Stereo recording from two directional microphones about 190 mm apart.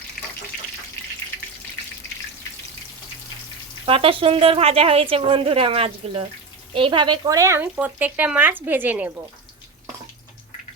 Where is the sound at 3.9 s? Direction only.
30° right (ahead or behind); by 9.1 s 10° right (ahead or behind).